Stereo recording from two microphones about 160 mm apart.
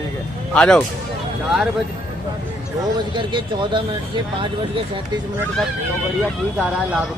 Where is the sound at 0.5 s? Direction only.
5° left (ahead or behind).